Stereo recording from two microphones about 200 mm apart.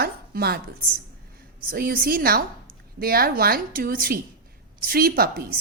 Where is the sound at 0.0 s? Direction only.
50° right (ahead or behind).